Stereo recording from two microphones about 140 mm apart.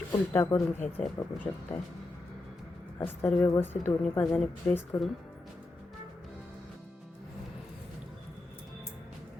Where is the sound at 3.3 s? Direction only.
20° left (ahead or behind).